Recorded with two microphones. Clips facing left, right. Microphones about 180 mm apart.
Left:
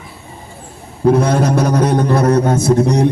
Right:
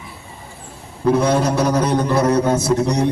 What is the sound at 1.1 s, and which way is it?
A man's voice, 55° left (ahead or behind).